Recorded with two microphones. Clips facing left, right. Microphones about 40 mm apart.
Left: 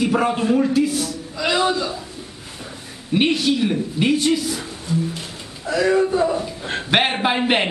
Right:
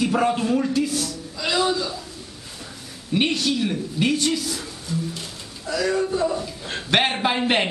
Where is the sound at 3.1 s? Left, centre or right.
Centre.